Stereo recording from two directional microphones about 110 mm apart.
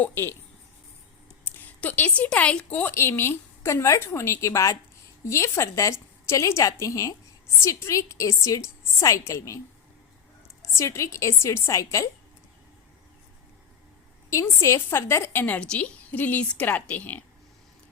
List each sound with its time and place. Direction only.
0.0 s a woman's voice: 20° left (ahead or behind)
1.5 s a woman's voice: 15° left (ahead or behind)
10.6 s a woman's voice: 25° left (ahead or behind)
14.3 s a woman's voice: 25° left (ahead or behind)